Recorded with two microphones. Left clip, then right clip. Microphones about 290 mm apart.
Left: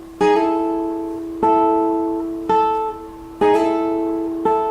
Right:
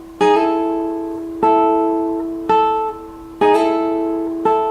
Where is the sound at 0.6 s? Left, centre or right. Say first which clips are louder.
Right 1 dB; right.